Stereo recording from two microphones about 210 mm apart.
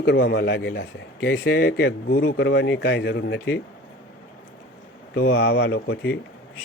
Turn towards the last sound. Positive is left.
turn(degrees=50)  # may be behind; listen again after turning